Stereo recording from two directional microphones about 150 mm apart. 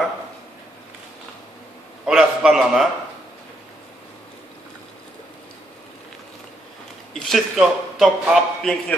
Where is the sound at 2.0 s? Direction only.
5° right (ahead or behind).